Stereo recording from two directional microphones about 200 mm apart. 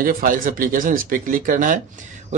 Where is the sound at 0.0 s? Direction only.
45° right (ahead or behind).